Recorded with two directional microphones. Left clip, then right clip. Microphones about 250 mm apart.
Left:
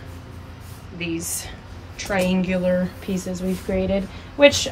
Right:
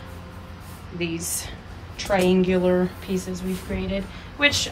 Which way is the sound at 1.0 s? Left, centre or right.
Centre.